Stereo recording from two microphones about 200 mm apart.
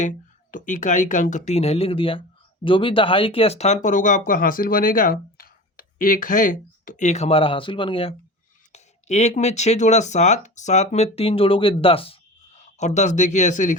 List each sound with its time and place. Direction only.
0.0 s speech: 40° left (ahead or behind)